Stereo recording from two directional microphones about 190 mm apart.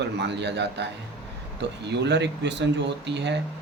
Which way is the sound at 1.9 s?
65° right (ahead or behind).